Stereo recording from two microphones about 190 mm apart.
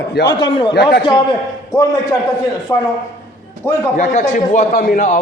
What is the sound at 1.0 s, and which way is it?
A man's voice, 25° left (ahead or behind).